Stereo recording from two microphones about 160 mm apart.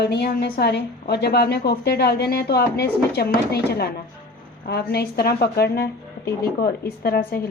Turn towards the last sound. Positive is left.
turn(degrees=75)  # may be behind; listen again after turning